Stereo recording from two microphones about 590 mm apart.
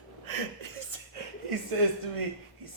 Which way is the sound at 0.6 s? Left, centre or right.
Right.